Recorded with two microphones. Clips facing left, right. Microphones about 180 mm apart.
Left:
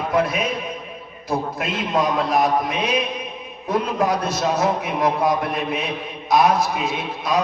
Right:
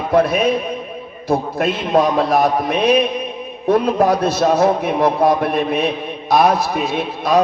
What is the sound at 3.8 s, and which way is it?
A man's voice, 30° right (ahead or behind).